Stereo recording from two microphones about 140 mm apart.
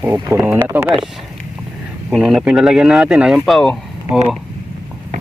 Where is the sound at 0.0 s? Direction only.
20° right (ahead or behind).